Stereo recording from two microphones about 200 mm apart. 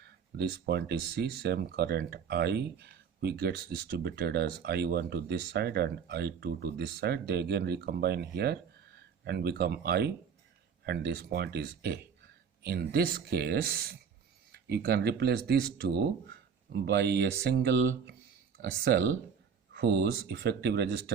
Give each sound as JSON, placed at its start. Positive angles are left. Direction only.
{"t": 0.0, "sound": "speech", "side_deg": -55}